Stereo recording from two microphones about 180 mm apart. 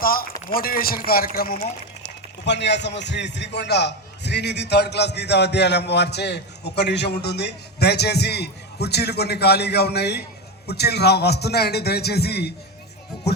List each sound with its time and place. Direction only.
0.0 s a man's voice: 55° left (ahead or behind)
2.4 s a man's voice: 75° left (ahead or behind)